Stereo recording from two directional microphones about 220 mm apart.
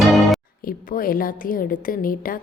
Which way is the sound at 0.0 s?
Centre (ahead or behind).